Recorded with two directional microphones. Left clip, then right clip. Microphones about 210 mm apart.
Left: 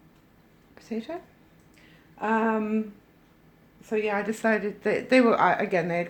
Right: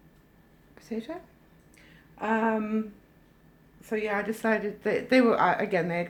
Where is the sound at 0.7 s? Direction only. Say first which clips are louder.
Left 1 dB; 15° left (ahead or behind).